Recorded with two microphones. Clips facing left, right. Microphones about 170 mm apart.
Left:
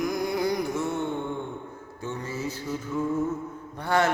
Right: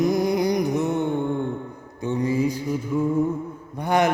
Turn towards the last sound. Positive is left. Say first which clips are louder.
# right 4 dB
turn(degrees=-15)  # may be behind; listen again after turning